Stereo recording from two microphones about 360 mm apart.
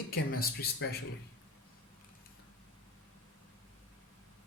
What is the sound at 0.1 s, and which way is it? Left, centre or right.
Speech, left.